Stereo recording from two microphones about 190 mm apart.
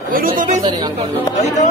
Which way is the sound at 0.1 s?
45° right (ahead or behind).